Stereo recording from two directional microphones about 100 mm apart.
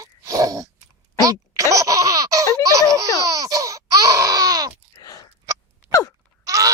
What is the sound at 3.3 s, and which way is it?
Baby cry, 35° right (ahead or behind).